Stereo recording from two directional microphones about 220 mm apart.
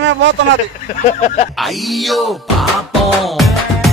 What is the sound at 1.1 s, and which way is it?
Speech, 35° left (ahead or behind).